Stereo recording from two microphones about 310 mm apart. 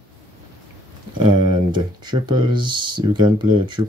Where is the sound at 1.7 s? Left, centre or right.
Centre.